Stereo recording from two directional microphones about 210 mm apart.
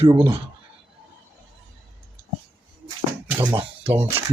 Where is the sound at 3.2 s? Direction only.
15° right (ahead or behind).